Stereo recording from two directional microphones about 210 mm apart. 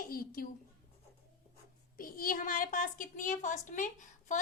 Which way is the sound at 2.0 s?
40° left (ahead or behind).